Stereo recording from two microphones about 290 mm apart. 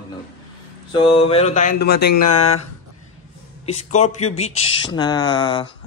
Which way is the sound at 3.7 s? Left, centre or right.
Left.